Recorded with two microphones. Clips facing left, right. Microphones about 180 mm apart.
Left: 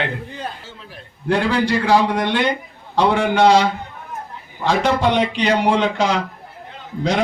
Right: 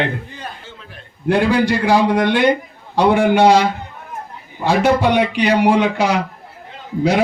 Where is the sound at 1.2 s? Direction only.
15° right (ahead or behind).